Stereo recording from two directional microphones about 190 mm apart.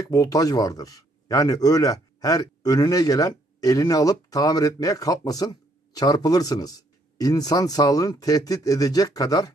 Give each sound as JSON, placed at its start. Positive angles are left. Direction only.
{"t": 0.1, "sound": "speech", "side_deg": 20}